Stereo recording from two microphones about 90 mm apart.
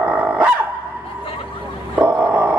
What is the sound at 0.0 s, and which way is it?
Dog, 15° right (ahead or behind).